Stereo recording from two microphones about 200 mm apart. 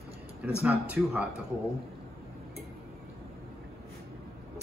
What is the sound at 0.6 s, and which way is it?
Speech, 5° right (ahead or behind).